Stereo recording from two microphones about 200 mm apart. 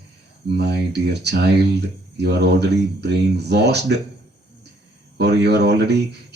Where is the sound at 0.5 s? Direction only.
55° right (ahead or behind).